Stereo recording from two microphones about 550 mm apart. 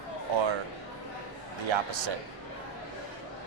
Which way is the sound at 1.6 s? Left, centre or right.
Right.